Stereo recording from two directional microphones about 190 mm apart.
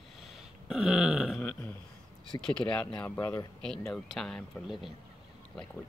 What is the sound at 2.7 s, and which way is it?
Speech, 5° left (ahead or behind).